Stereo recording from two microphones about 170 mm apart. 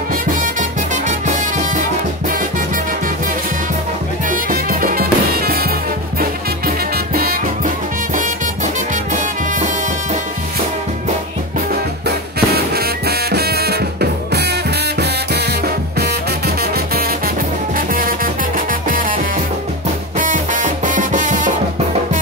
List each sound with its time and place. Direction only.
0.6 s music: 45° right (ahead or behind)
4.3 s music: 55° right (ahead or behind)
7.2 s music: 55° right (ahead or behind)
11.7 s music: 65° right (ahead or behind)
15.0 s music: 75° right (ahead or behind)
17.7 s music: 55° right (ahead or behind)
20.2 s music: 50° right (ahead or behind)